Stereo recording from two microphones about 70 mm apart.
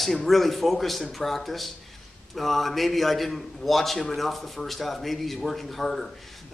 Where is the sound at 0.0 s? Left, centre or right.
Centre.